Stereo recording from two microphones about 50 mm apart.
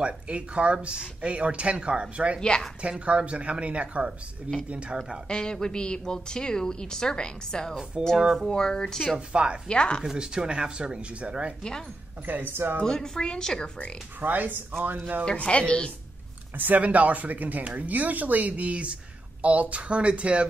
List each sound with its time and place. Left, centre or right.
0.0 s speech: right
5.3 s a woman's voice: centre
8.0 s speech: centre
8.4 s a woman's voice: centre
9.3 s speech: right
9.7 s a woman's voice: centre
10.1 s speech: centre
12.3 s speech: right
12.8 s a woman's voice: centre
14.2 s a man's voice: right
15.3 s a woman's voice: left
16.5 s speech: right